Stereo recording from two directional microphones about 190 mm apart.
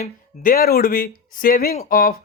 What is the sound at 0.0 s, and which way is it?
Speech, 50° left (ahead or behind).